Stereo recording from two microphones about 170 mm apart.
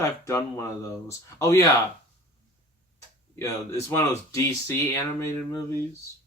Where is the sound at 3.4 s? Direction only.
15° left (ahead or behind).